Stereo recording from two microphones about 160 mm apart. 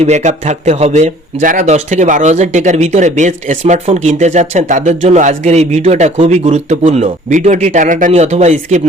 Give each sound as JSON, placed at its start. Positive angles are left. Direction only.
{"t": 0.0, "sound": "speech", "side_deg": -45}